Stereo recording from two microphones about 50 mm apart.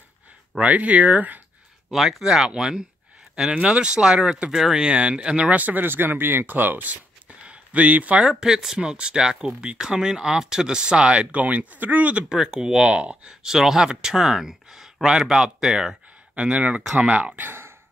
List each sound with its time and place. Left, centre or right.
0.6 s speech: right
1.9 s speech: centre
4.7 s speech: right
5.5 s speech: right
7.2 s a sound: right
8.3 s speech: centre; by 12.3 s right
12.3 s speech: centre
13.3 s speech: centre
16.3 s speech: right
17.4 s speech: right